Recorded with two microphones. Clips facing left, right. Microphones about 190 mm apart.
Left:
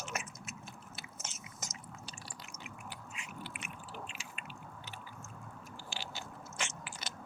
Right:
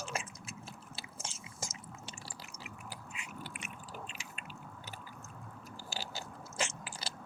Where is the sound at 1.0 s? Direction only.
30° right (ahead or behind).